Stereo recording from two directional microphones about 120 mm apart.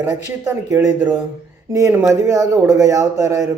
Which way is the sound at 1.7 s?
20° right (ahead or behind).